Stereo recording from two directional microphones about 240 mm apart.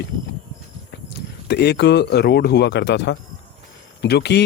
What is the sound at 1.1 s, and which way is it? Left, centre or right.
Speech, left.